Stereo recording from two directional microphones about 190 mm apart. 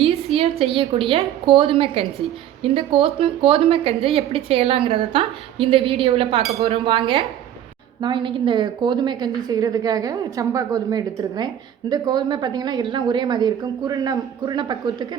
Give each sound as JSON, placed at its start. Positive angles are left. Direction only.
{"t": 0.3, "sound": "a woman's voice", "side_deg": -30}